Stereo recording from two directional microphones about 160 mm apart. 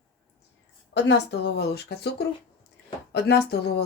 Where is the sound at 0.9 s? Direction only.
90° left.